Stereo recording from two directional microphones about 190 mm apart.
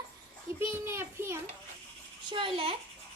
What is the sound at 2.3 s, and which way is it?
Speech, 30° right (ahead or behind).